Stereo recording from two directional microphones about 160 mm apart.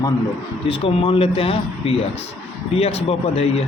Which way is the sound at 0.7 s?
35° left (ahead or behind).